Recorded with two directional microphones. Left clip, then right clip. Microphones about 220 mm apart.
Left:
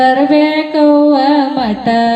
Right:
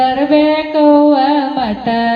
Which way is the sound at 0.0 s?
35° left (ahead or behind).